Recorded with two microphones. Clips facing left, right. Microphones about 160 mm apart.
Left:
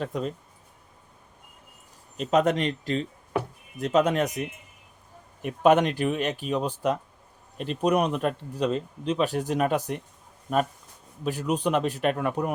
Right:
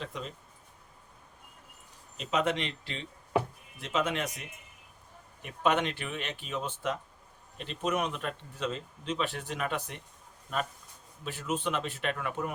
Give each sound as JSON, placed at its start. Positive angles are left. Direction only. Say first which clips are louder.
{"t": 0.0, "sound": "speech", "louder": "left 10 dB", "side_deg": 45}
{"t": 2.1, "sound": "speech", "louder": "left 7 dB", "side_deg": 45}
{"t": 5.4, "sound": "speech", "louder": "left 8 dB", "side_deg": 45}
{"t": 11.2, "sound": "speech", "louder": "left 7 dB", "side_deg": 40}